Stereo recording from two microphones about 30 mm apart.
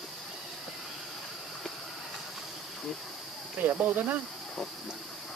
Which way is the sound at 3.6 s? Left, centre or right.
Right.